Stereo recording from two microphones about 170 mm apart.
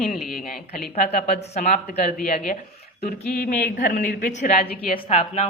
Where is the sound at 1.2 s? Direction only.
40° left (ahead or behind).